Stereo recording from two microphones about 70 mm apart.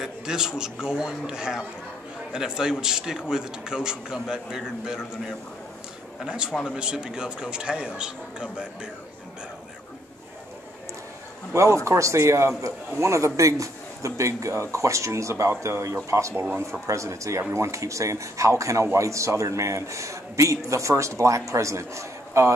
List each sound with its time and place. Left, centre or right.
0.0 s a man's voice: centre
11.5 s a man's voice: right